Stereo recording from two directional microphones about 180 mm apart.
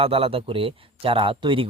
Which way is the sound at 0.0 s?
30° right (ahead or behind).